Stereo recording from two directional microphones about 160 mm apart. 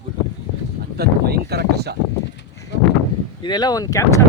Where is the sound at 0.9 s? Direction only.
80° right.